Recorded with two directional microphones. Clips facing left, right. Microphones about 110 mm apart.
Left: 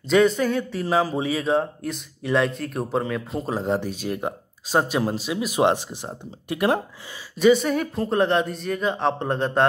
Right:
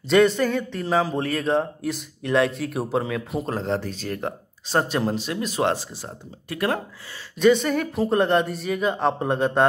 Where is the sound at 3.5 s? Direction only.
10° left (ahead or behind).